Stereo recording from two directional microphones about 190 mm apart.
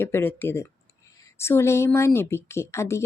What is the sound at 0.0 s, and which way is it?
Speech, 10° left (ahead or behind).